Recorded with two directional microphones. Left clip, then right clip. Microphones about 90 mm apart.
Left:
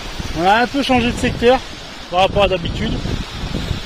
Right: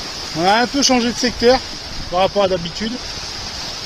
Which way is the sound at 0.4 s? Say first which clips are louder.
Even; 30° right (ahead or behind).